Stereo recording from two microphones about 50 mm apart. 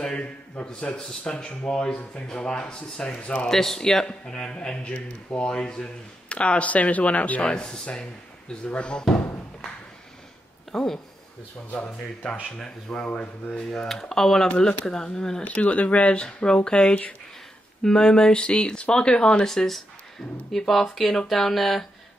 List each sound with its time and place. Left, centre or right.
0.0 s a sound: centre
0.7 s a man's voice: centre
7.4 s a man's voice: centre
10.7 s speech: centre
12.4 s speech: centre
13.7 s a man's voice: centre
15.4 s a man's voice: left; by 21.8 s centre